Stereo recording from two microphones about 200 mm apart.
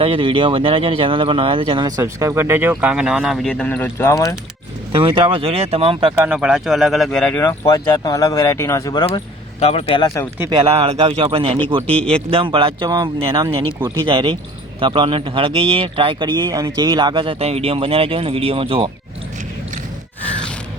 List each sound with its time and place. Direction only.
0.0 s speech: 25° right (ahead or behind)
2.0 s speech: 15° right (ahead or behind); by 4.4 s 15° left (ahead or behind)
4.9 s speech: 25° right (ahead or behind)
6.1 s speech: 5° right (ahead or behind); by 9.0 s 20° left (ahead or behind)
9.0 s speech: 30° left (ahead or behind)
10.3 s speech: 10° right (ahead or behind)
10.6 s speech: 30° right (ahead or behind)